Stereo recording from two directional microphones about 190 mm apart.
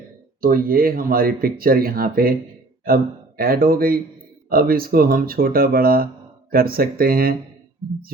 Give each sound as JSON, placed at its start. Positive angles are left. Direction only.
{"t": 0.4, "sound": "speech", "side_deg": -50}